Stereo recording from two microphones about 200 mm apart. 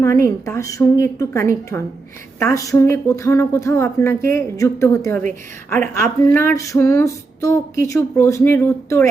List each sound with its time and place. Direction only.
0.0 s speech: 15° left (ahead or behind)